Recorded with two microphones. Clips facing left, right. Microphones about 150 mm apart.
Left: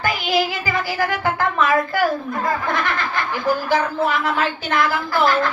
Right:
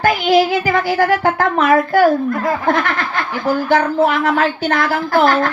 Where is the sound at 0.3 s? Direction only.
60° right (ahead or behind).